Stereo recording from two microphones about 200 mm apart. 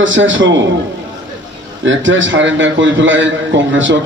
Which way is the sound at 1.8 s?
70° right (ahead or behind).